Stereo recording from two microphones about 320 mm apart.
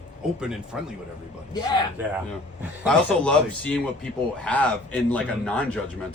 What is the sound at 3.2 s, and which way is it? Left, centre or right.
Speech, centre.